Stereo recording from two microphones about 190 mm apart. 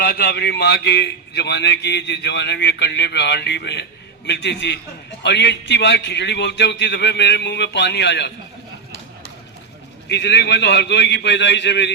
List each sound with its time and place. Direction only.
0.0 s a man's voice: 60° left (ahead or behind)
10.1 s a man's voice: 65° left (ahead or behind)